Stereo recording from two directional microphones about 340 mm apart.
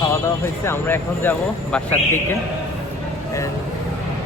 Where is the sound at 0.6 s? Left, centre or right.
Centre.